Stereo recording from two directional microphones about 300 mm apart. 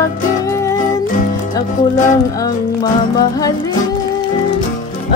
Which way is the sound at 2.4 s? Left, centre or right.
Centre.